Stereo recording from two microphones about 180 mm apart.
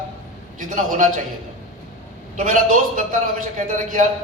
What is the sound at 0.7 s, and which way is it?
Speech, 45° right (ahead or behind).